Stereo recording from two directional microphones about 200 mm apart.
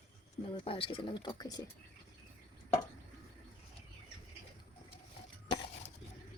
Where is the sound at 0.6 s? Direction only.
25° left (ahead or behind).